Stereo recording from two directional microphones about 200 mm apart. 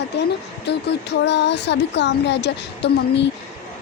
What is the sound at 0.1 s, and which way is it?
A woman's voice, 55° left (ahead or behind).